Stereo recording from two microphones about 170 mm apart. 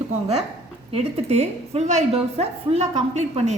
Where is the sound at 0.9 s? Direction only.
35° right (ahead or behind).